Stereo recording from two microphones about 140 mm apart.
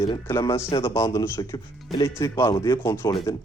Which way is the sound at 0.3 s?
20° left (ahead or behind).